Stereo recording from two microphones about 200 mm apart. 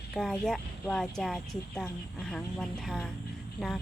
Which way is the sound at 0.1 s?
Centre (ahead or behind).